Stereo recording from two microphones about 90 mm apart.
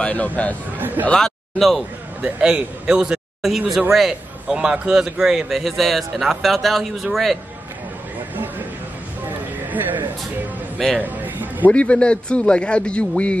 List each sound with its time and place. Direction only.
0.0 s speech: 15° left (ahead or behind)
0.7 s speech: 20° right (ahead or behind)
1.0 s speech: 5° left (ahead or behind)
2.2 s a man's voice: 10° right (ahead or behind)
9.7 s speech: 20° right (ahead or behind)
11.6 s speech: 15° left (ahead or behind)